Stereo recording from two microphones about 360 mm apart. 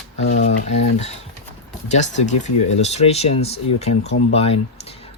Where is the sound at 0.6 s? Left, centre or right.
Centre.